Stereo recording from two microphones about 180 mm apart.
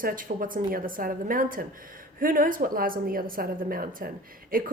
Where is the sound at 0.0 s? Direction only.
50° right (ahead or behind).